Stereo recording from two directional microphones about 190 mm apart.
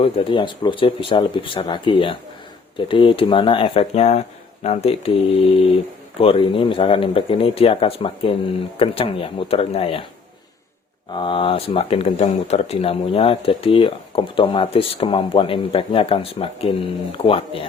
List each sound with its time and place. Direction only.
0.0 s speech: 30° left (ahead or behind)
11.1 s speech: 25° left (ahead or behind)